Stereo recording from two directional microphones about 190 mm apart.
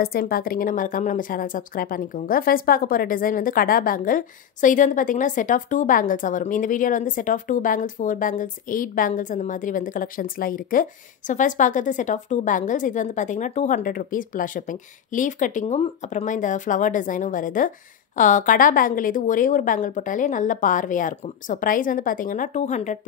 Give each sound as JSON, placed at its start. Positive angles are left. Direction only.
{"t": 0.0, "sound": "a woman's voice", "side_deg": 50}